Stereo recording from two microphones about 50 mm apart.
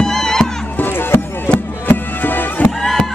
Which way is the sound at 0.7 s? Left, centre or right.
Left.